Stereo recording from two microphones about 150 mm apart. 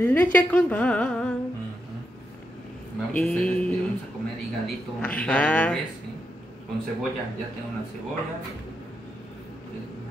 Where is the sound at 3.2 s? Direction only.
5° left (ahead or behind).